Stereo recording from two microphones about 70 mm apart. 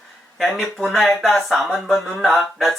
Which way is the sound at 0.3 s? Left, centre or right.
Centre.